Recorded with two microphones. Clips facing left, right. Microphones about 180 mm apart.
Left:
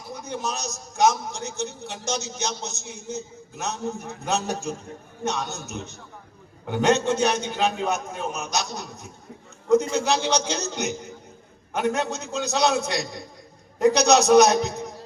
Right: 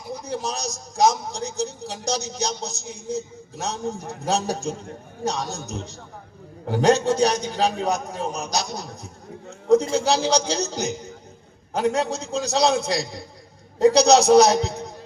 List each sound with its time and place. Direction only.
0.1 s a man's voice: 35° right (ahead or behind)